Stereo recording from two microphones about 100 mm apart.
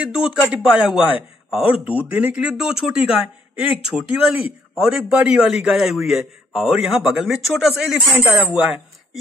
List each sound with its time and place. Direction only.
0.0 s a man's voice: 5° right (ahead or behind)
8.3 s speech: 15° right (ahead or behind)